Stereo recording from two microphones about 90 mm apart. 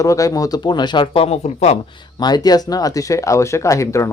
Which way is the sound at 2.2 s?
50° left (ahead or behind).